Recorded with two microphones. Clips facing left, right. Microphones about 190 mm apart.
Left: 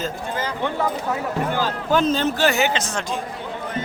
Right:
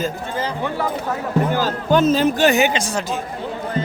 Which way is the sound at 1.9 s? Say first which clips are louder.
Right 5 dB; 5° right (ahead or behind).